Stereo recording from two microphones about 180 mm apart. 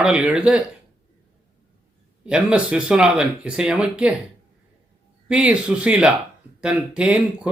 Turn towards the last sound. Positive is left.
turn(degrees=-5)  # may be behind; listen again after turning